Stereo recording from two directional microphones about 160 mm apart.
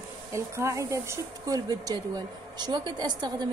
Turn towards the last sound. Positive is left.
turn(degrees=-25)  # may be behind; listen again after turning